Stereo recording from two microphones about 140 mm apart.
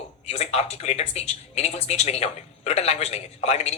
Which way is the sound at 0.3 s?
50° left (ahead or behind).